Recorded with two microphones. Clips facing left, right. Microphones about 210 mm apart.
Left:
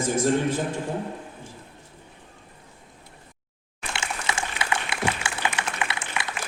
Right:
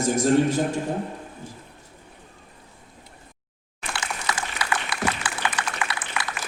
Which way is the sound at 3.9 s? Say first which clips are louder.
Even; 25° left (ahead or behind).